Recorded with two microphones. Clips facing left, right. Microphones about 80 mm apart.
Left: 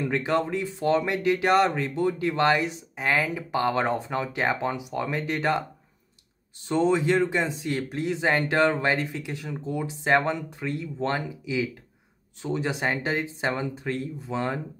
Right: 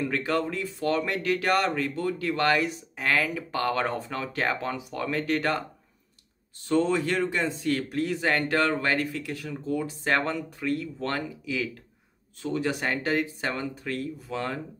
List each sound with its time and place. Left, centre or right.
0.0 s speech: left
6.7 s speech: centre